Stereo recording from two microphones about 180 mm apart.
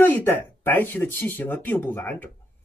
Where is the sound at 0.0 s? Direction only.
10° left (ahead or behind).